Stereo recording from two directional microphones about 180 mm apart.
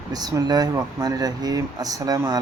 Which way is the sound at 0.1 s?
20° right (ahead or behind).